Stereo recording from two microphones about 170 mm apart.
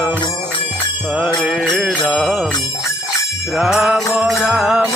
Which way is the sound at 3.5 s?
5° right (ahead or behind).